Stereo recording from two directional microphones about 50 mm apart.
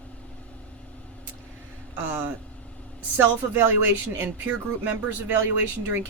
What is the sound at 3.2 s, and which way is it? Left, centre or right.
Speech, right.